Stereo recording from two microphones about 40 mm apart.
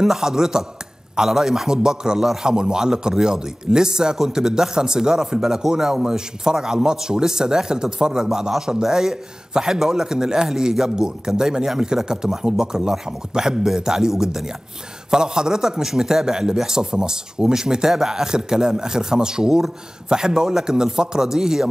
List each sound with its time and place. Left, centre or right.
0.0 s a man's voice: centre